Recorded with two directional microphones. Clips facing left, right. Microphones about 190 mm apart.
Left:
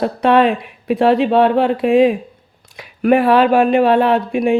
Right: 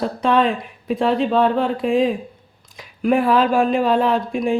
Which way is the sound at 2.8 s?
70° left (ahead or behind).